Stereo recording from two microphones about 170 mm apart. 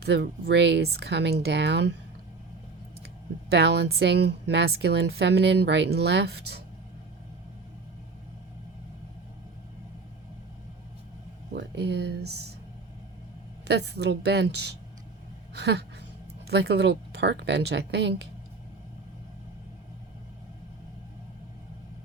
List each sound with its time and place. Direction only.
0.0 s speech: 80° right
3.5 s a woman's voice: 80° right
11.5 s speech: 85° right
13.7 s speech: 75° right (ahead or behind)